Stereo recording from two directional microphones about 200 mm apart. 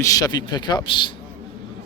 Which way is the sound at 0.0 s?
15° left (ahead or behind).